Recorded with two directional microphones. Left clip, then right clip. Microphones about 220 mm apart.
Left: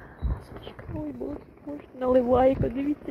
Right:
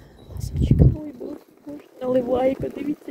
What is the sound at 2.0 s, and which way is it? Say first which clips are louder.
Speech: even; 30° right (ahead or behind).